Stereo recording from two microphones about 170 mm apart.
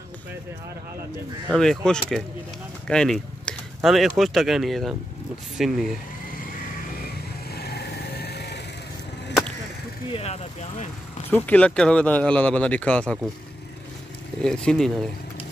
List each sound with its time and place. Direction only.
1.5 s speech: 5° left (ahead or behind)
7.5 s vehicle: 70° left (ahead or behind)
10.1 s speech: 40° left (ahead or behind)
11.2 s speech: 10° left (ahead or behind)
14.4 s speech: 5° left (ahead or behind)